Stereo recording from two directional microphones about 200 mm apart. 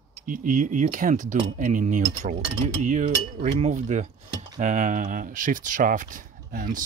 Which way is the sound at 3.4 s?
40° right (ahead or behind).